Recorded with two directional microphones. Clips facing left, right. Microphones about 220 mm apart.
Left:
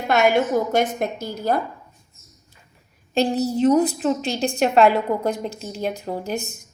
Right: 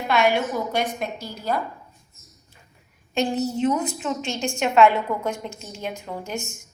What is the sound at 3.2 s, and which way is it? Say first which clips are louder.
A woman's voice: left 3 dB; 35° left (ahead or behind).